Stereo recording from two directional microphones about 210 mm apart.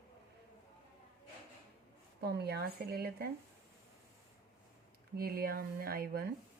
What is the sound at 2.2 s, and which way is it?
A woman's voice, 50° right (ahead or behind).